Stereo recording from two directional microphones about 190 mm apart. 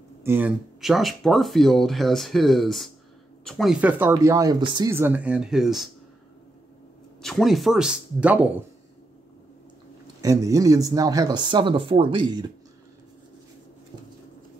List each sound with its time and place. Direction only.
0.2 s speech: 10° right (ahead or behind)
0.7 s speech: centre (ahead or behind)
4.1 s speech: 15° right (ahead or behind)
4.9 s speech: 10° right (ahead or behind)
7.2 s speech: centre (ahead or behind)
10.2 s speech: 20° right (ahead or behind)